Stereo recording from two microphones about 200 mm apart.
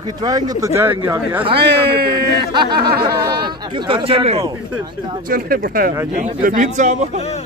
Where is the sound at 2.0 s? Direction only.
20° right (ahead or behind).